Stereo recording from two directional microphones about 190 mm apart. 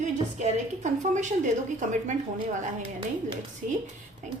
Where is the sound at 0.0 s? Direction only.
40° right (ahead or behind).